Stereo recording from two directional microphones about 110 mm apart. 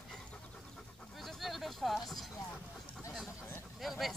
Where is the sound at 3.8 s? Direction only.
Centre (ahead or behind).